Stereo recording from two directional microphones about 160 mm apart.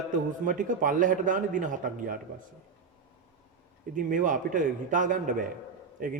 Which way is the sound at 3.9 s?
55° right (ahead or behind).